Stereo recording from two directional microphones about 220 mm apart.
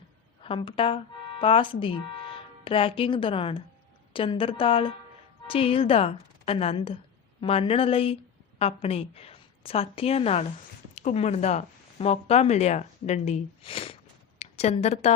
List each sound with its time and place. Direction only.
0.4 s a woman's voice: 25° left (ahead or behind)